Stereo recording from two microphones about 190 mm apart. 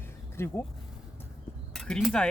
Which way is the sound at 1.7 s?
Centre (ahead or behind).